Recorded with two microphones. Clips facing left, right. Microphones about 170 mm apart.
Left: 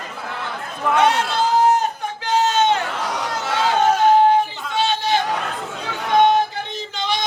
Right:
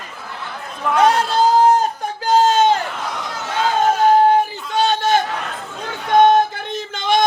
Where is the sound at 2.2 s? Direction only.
35° right (ahead or behind).